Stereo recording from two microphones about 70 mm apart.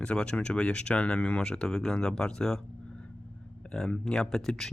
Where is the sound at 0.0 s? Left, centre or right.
Centre.